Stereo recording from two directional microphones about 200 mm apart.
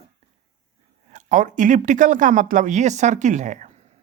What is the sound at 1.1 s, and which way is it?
Speech, 40° right (ahead or behind).